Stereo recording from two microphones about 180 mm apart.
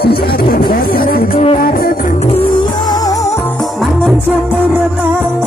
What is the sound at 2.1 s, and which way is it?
Music, 35° left (ahead or behind).